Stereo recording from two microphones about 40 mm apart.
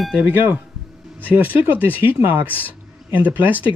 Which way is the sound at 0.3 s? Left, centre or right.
Right.